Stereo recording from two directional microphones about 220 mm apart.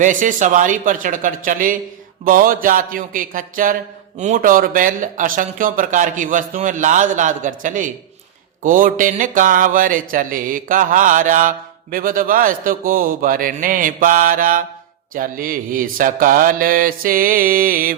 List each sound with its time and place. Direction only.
0.0 s mantra: 35° right (ahead or behind)